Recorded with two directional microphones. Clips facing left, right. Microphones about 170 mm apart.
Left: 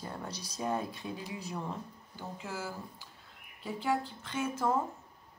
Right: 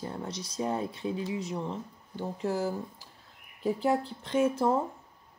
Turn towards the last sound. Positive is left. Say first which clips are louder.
# right 7 dB
turn(degrees=-30)  # may be behind; listen again after turning